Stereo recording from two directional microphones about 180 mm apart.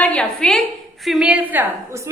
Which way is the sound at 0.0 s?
5° left (ahead or behind).